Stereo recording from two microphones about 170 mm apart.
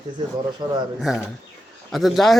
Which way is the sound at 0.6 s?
25° right (ahead or behind).